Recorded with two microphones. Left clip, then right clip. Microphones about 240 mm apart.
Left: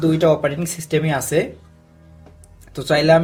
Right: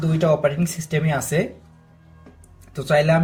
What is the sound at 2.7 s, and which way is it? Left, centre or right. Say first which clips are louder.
Speech: left 4 dB; left.